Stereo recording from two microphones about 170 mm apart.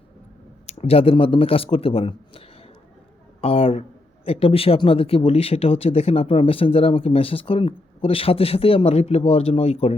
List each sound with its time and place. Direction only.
0.7 s speech: 35° left (ahead or behind)
3.4 s speech: 35° left (ahead or behind)